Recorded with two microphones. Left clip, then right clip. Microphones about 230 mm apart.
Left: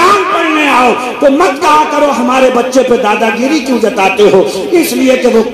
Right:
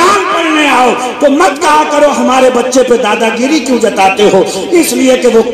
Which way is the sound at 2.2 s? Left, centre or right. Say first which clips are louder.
Right 1 dB; right.